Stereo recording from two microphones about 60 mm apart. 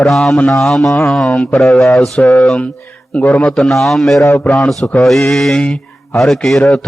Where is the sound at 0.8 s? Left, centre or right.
Left.